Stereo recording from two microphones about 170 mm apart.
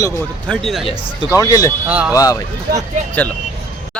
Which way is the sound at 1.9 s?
10° right (ahead or behind).